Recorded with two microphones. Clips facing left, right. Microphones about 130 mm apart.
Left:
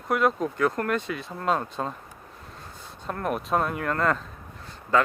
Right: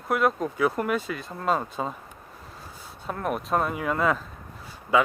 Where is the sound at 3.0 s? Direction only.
Centre (ahead or behind).